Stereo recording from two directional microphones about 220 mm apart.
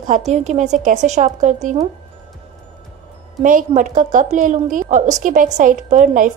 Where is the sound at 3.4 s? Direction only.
35° right (ahead or behind).